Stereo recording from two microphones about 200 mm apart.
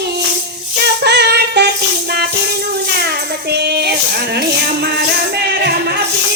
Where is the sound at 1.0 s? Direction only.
55° right (ahead or behind).